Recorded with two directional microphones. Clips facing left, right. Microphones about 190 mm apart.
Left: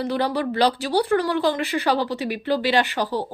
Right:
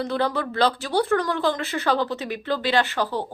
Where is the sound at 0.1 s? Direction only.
15° left (ahead or behind).